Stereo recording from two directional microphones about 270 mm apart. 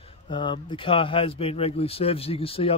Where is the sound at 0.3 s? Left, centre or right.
Centre.